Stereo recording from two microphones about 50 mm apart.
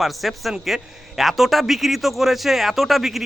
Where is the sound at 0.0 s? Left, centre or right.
Centre.